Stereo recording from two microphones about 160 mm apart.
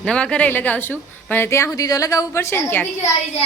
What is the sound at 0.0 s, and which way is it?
Speech, 5° left (ahead or behind).